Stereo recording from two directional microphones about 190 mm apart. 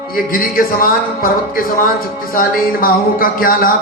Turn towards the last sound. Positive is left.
turn(degrees=50)  # may be behind; listen again after turning